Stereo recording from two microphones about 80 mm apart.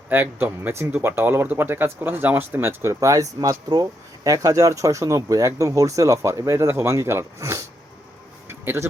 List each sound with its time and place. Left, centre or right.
0.1 s speech: right
2.9 s speech: right
3.7 s speech: right
8.4 s music: right